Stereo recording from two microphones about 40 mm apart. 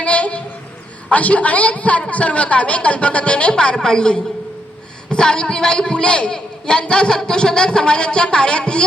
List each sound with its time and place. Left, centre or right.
0.0 s music: left
1.1 s a woman's voice: left